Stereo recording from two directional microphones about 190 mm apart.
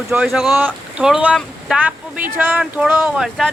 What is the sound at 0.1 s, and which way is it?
Speech, 5° right (ahead or behind).